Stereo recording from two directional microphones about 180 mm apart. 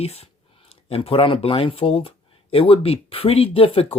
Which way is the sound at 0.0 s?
35° left (ahead or behind).